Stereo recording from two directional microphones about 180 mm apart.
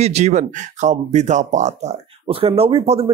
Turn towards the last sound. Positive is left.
turn(degrees=-35)  # may be behind; listen again after turning